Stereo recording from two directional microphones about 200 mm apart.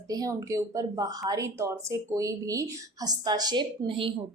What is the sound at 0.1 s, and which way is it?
Speech, 15° right (ahead or behind).